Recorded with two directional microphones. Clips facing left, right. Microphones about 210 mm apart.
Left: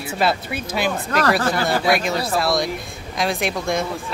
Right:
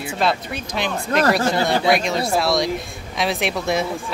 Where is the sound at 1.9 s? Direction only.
Centre (ahead or behind).